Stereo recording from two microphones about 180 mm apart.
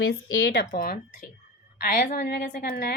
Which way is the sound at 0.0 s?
65° left (ahead or behind).